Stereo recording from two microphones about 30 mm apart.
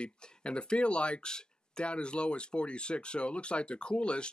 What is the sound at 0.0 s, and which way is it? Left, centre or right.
Speech, left.